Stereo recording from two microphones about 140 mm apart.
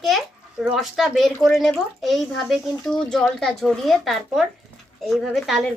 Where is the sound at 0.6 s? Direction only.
5° right (ahead or behind).